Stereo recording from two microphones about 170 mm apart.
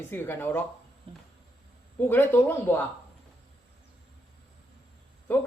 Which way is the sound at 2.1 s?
15° left (ahead or behind).